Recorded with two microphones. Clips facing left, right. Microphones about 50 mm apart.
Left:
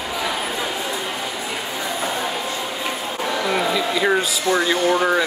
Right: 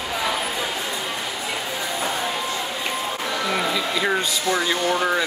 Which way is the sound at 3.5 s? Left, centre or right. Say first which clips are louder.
Left 3 dB; centre.